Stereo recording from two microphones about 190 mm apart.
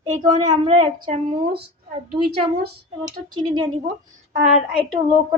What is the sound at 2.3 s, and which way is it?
Speech, 55° right (ahead or behind).